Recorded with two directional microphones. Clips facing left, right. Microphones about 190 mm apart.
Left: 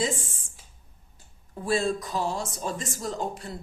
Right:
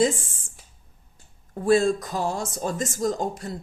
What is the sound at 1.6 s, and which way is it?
A woman's voice, 50° right (ahead or behind).